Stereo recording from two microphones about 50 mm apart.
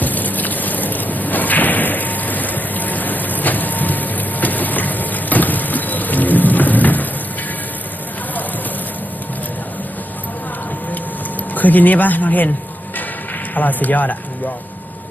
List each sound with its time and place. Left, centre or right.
0.0 s whip: left
11.5 s speech: left
13.5 s speech: left